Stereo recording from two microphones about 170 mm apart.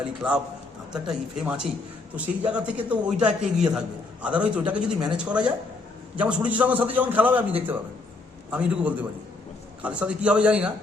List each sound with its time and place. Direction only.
0.0 s a man's voice: 5° right (ahead or behind)